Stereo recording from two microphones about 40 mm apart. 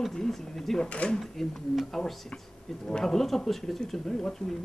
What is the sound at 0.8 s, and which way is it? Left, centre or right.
Speech, left.